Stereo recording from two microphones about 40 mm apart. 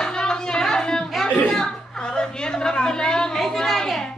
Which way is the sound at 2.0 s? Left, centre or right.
Left.